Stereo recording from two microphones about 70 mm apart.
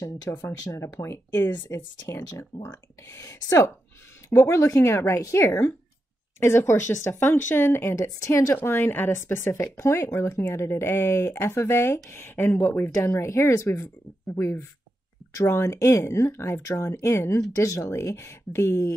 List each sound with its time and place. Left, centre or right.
0.0 s a woman's voice: left
7.9 s a woman's voice: left
17.6 s speech: left